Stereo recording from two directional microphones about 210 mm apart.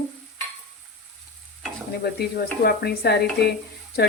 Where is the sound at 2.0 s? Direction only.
50° left (ahead or behind).